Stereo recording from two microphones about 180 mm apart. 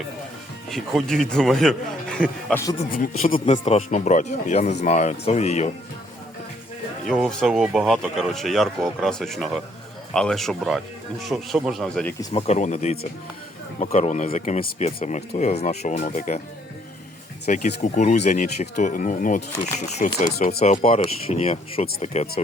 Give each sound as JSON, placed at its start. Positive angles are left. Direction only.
{"t": 0.7, "sound": "speech", "side_deg": 0}
{"t": 2.5, "sound": "a man's voice", "side_deg": 15}
{"t": 2.9, "sound": "speech", "side_deg": 50}
{"t": 3.4, "sound": "speech", "side_deg": 35}
{"t": 7.1, "sound": "speech", "side_deg": 5}
{"t": 12.3, "sound": "speech", "side_deg": 35}
{"t": 15.6, "sound": "speech", "side_deg": 40}
{"t": 17.4, "sound": "speech", "side_deg": 40}
{"t": 20.3, "sound": "speech", "side_deg": 60}
{"t": 20.6, "sound": "speech", "side_deg": 35}